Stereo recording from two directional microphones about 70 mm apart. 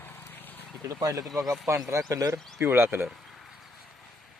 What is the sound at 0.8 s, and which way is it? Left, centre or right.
Speech, right.